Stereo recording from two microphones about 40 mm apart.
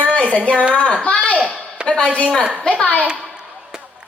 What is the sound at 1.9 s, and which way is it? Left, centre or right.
Speech, left.